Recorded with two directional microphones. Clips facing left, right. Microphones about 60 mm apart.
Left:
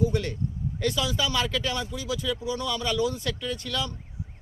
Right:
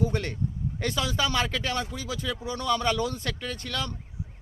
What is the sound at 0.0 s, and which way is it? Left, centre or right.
Speech, right.